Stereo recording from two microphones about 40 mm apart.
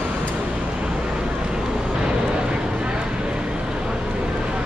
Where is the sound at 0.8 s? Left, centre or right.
Right.